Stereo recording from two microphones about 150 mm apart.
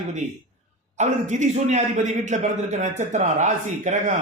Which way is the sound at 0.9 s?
50° right (ahead or behind).